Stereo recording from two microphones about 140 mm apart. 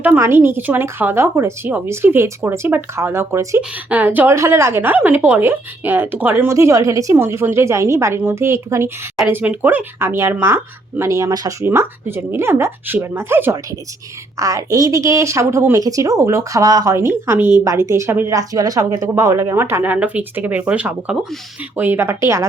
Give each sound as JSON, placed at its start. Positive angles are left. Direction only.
{"t": 0.0, "sound": "a woman's voice", "side_deg": -15}